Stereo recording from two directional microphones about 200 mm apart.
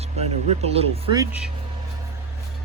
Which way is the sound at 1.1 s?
15° right (ahead or behind).